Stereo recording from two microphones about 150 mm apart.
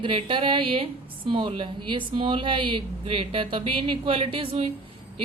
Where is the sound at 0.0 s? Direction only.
35° right (ahead or behind).